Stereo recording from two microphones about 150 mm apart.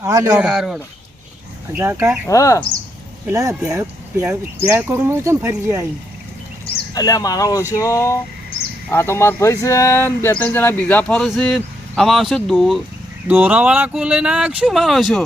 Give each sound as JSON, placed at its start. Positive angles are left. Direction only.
{"t": 0.0, "sound": "speech", "side_deg": -20}
{"t": 0.3, "sound": "speech", "side_deg": -5}
{"t": 1.7, "sound": "speech", "side_deg": -15}
{"t": 2.2, "sound": "speech", "side_deg": 20}
{"t": 3.2, "sound": "speech", "side_deg": -20}
{"t": 4.2, "sound": "speech", "side_deg": -10}
{"t": 6.9, "sound": "speech", "side_deg": 25}
{"t": 13.2, "sound": "speech", "side_deg": -10}